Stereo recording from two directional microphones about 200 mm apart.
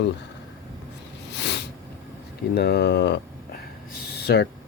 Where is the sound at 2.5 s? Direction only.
55° left (ahead or behind).